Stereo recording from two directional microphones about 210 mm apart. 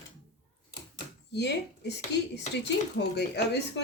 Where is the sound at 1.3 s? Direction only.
55° left (ahead or behind).